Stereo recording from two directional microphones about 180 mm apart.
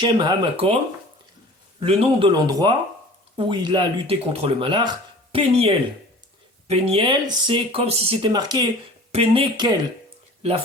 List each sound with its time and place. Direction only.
0.0 s speech: 25° right (ahead or behind)
1.8 s speech: 35° right (ahead or behind)